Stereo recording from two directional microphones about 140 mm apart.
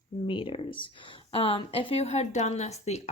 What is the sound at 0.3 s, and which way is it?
A woman's voice, 40° left (ahead or behind).